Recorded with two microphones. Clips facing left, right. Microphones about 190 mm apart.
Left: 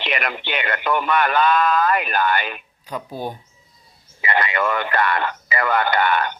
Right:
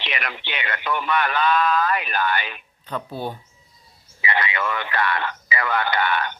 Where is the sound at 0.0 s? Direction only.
50° left (ahead or behind).